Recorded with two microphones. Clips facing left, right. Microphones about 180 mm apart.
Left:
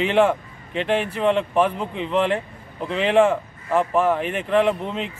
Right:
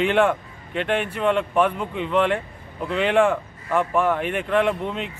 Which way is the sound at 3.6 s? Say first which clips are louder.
Left 2 dB; 35° left (ahead or behind).